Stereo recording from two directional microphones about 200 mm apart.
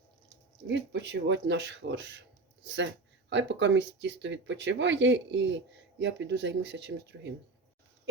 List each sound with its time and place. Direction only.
0.7 s speech: 65° right (ahead or behind)